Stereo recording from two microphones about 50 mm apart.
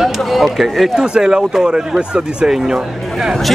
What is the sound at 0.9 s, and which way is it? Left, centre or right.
Speech, centre.